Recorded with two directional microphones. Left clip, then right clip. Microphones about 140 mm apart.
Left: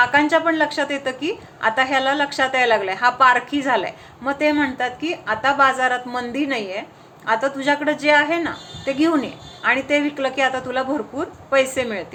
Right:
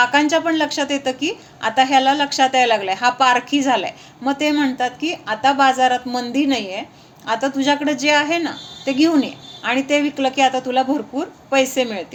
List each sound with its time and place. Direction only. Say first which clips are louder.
0.0 s a woman's voice: even; 45° right (ahead or behind)